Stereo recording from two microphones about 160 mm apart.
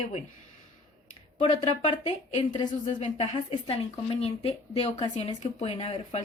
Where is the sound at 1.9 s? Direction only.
40° left (ahead or behind).